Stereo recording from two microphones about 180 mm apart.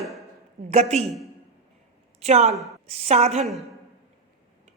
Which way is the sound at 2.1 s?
35° right (ahead or behind).